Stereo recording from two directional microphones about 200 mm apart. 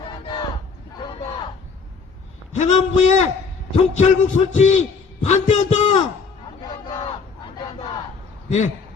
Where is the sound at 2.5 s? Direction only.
35° left (ahead or behind).